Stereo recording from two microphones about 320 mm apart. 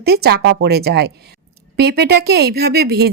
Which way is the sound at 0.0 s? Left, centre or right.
Right.